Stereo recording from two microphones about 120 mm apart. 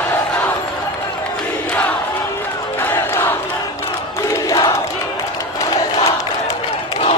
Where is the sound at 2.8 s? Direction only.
15° left (ahead or behind).